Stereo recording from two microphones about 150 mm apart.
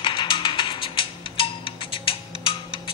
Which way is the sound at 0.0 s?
35° left (ahead or behind).